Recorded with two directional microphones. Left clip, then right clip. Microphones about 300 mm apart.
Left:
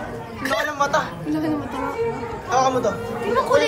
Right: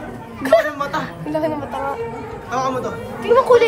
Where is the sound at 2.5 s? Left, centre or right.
Left.